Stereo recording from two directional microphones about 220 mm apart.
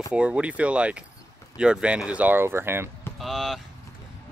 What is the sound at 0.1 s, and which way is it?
Speech, 5° right (ahead or behind).